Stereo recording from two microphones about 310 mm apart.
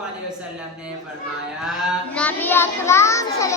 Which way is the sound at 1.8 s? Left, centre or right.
Centre.